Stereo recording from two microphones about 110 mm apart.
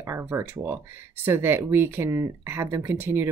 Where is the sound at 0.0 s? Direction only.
25° right (ahead or behind).